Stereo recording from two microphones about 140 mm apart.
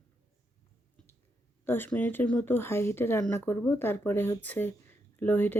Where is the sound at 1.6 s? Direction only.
15° left (ahead or behind).